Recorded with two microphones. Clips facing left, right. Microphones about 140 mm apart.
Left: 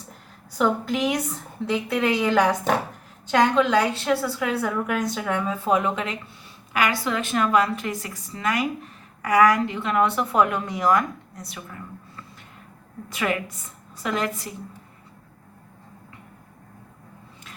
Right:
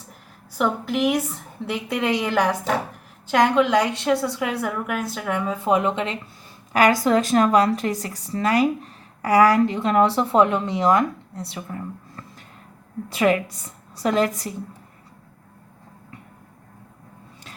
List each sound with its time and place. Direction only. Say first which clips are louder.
0.5 s a woman's voice: even; 5° right (ahead or behind)
4.6 s a woman's voice: left 1 dB; 5° right (ahead or behind); by 6.1 s 25° right (ahead or behind)
6.7 s speech: right 7 dB; 40° right (ahead or behind)
13.1 s speech: right 6 dB; 35° right (ahead or behind)